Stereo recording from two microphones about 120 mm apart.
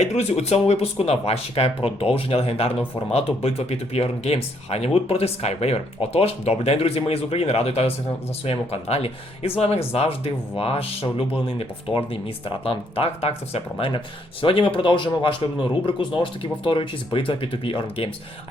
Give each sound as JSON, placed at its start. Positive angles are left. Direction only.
{"t": 0.0, "sound": "speech", "side_deg": 65}
{"t": 11.9, "sound": "speech", "side_deg": 50}